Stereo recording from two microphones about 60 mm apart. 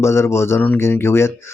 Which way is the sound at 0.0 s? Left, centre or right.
Left.